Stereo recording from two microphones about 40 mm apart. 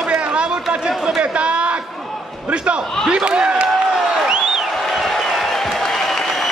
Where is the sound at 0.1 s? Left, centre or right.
Right.